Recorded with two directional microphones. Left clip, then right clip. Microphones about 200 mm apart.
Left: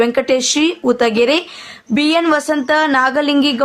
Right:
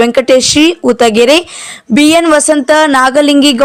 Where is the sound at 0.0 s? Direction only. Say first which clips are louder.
Right 7 dB; 35° right (ahead or behind).